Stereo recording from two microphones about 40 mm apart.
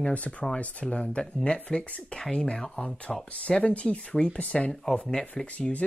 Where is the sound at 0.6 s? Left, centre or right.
Left; by 2.9 s centre.